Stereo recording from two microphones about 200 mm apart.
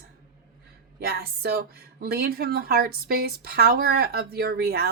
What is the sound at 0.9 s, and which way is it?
Speech, 50° right (ahead or behind).